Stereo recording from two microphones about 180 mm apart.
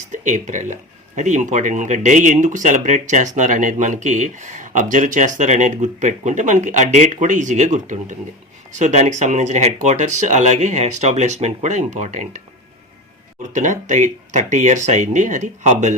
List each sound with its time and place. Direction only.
0.1 s speech: 45° right (ahead or behind)
13.5 s speech: 45° right (ahead or behind)